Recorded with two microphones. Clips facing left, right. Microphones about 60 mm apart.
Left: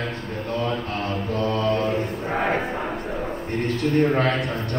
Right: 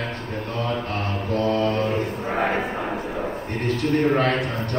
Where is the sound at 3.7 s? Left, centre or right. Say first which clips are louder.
Even; right.